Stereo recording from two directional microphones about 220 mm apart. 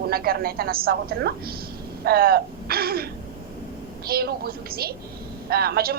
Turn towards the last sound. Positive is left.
turn(degrees=-45)  # may be behind; listen again after turning